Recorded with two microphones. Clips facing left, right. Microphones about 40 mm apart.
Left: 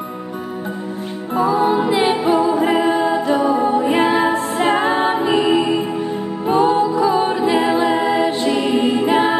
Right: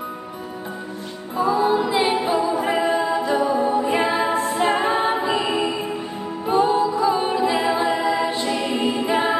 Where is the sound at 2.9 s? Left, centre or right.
Left.